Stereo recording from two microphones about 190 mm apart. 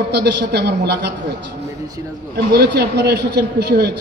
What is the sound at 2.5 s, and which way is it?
A man's voice, 60° right (ahead or behind).